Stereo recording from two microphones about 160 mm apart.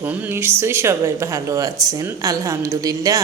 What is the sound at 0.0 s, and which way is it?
A woman's voice, 10° right (ahead or behind).